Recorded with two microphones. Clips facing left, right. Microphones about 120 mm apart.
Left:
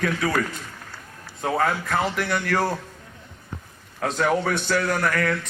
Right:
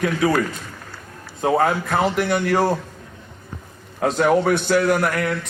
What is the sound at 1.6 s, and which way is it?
A man's voice, 25° right (ahead or behind).